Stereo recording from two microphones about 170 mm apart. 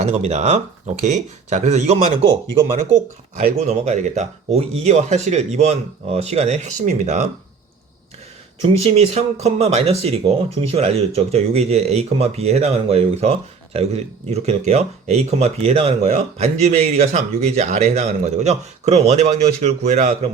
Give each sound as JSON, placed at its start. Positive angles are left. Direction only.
{"t": 0.0, "sound": "speech", "side_deg": -40}
{"t": 3.3, "sound": "speech", "side_deg": -40}
{"t": 8.6, "sound": "speech", "side_deg": -40}